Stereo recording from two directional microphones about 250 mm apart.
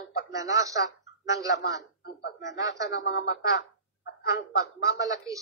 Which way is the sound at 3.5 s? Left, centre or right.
Left.